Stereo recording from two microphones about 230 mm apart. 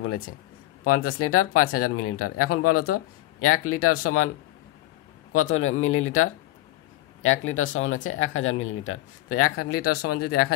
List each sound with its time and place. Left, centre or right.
0.8 s speech: left
5.3 s speech: left